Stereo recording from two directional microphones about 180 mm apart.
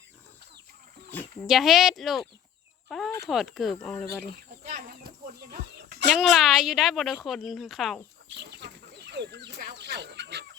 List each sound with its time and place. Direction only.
1.5 s speech: centre (ahead or behind)
4.3 s music: 55° right (ahead or behind)
6.1 s speech: centre (ahead or behind)
8.3 s chicken: 70° right (ahead or behind)